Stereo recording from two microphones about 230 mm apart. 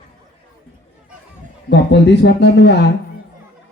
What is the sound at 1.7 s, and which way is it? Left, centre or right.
Speech, left.